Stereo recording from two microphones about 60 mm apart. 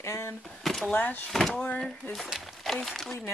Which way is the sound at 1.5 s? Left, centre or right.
Left.